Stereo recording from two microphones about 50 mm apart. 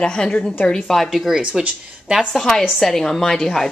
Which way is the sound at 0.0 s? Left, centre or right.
Centre.